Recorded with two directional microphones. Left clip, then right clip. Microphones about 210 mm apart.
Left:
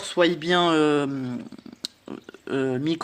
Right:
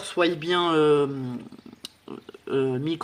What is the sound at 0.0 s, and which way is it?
Speech, 35° left (ahead or behind).